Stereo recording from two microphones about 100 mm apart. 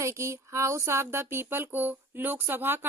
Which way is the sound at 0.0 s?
30° right (ahead or behind).